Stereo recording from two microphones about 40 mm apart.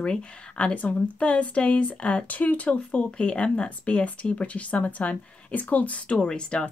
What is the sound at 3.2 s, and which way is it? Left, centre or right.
Speech, left.